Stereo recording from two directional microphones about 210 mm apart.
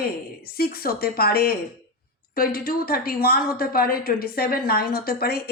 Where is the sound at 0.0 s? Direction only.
45° left (ahead or behind).